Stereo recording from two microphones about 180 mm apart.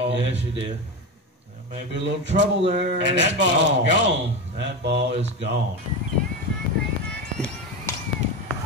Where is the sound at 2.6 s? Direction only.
35° right (ahead or behind).